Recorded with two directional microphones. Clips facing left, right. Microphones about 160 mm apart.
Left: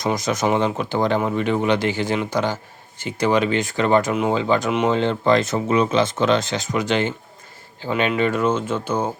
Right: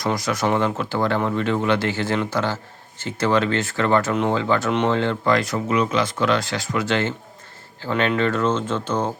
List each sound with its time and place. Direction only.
0.0 s speech: 20° left (ahead or behind)